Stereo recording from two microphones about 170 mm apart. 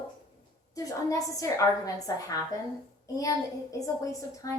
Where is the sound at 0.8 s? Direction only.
20° left (ahead or behind).